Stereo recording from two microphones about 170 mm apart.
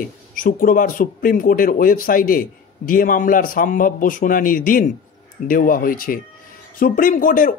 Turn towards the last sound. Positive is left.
turn(degrees=55)  # may be behind; listen again after turning